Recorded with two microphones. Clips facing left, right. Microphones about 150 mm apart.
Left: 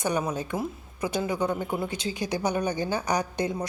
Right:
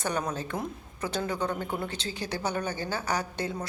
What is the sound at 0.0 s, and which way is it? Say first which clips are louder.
A woman's voice: left 3 dB; 10° left (ahead or behind).